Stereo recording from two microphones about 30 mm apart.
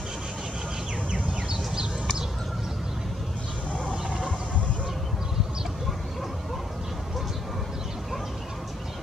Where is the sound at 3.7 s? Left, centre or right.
Left.